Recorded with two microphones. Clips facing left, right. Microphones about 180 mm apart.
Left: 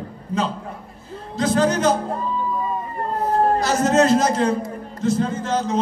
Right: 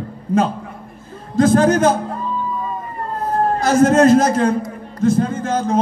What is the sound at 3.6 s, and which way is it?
A man's voice, 50° right (ahead or behind).